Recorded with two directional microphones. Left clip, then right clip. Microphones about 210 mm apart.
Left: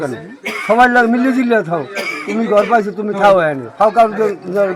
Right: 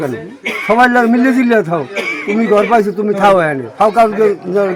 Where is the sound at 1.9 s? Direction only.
55° left (ahead or behind).